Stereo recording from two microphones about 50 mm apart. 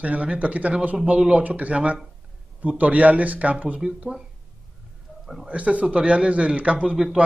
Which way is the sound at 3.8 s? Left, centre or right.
Centre.